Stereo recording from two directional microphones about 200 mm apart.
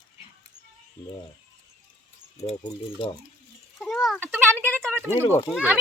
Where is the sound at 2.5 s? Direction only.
25° left (ahead or behind).